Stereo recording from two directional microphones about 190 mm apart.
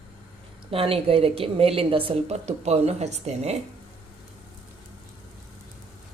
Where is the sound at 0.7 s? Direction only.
30° right (ahead or behind).